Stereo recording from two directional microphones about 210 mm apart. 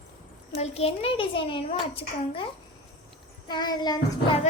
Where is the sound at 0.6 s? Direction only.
30° left (ahead or behind).